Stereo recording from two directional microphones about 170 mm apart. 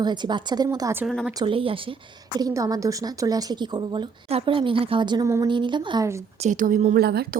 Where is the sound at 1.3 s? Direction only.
30° right (ahead or behind).